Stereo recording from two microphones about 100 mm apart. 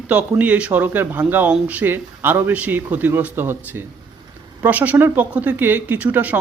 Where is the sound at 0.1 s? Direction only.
15° right (ahead or behind).